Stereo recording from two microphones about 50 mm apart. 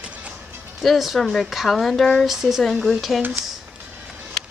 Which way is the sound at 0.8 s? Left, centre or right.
Centre.